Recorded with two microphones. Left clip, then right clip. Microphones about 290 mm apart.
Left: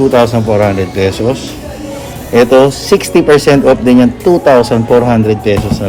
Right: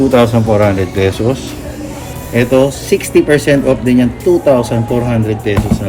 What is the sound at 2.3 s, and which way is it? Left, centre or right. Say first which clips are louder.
A man's voice: left 5 dB; left.